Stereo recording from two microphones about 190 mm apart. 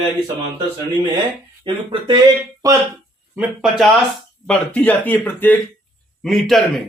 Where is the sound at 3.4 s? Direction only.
Centre (ahead or behind).